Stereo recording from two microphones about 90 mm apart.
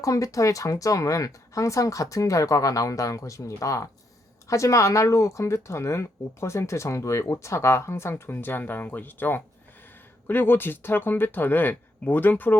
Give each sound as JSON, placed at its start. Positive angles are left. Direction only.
{"t": 0.0, "sound": "speech", "side_deg": 35}